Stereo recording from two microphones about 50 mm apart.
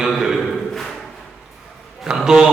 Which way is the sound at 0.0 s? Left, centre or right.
Centre.